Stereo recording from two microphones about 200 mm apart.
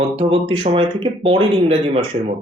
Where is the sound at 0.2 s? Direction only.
30° right (ahead or behind).